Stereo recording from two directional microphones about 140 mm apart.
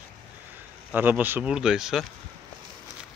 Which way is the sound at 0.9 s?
15° right (ahead or behind).